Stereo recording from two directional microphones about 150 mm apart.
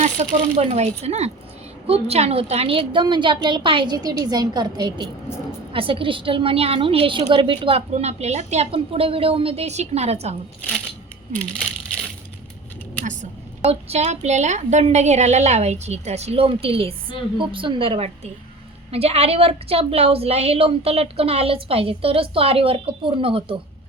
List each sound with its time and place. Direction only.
0.0 s a woman's voice: 50° right (ahead or behind)
13.6 s a woman's voice: 45° right (ahead or behind)